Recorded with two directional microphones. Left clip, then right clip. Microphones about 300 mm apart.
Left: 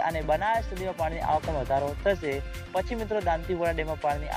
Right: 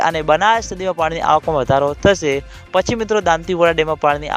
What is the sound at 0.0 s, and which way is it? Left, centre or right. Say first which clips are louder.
Speech: right 12 dB; right.